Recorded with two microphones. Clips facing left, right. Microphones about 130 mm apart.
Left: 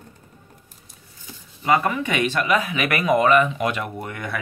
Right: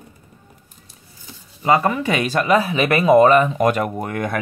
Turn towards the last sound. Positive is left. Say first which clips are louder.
# right 7 dB
turn(degrees=-45)  # may be behind; listen again after turning